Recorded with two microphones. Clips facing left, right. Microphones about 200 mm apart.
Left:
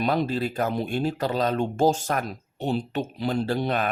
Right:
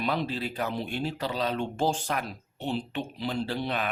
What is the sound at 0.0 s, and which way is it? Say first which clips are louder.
Speech: left 5 dB; 45° left (ahead or behind).